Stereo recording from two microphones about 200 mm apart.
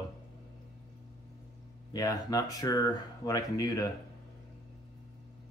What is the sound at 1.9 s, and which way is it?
Speech, 20° left (ahead or behind).